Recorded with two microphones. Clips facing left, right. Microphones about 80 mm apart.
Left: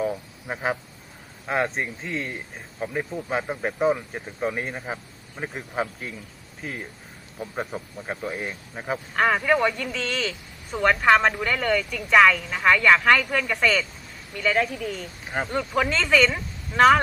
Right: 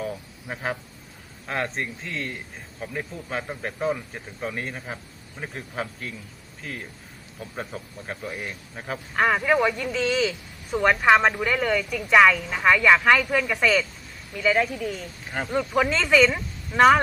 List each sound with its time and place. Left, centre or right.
0.0 s a sound: centre
1.5 s speech: centre
9.1 s speech: centre
15.3 s speech: centre
15.8 s a woman's voice: centre